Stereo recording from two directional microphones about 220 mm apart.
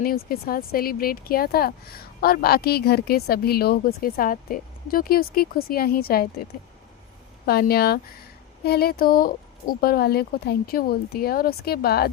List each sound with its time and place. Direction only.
0.0 s speech: 40° left (ahead or behind)
7.4 s speech: 45° left (ahead or behind)